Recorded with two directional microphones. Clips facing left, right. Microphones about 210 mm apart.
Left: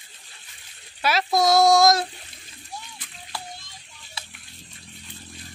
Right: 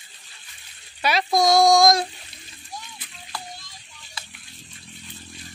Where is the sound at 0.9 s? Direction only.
5° left (ahead or behind).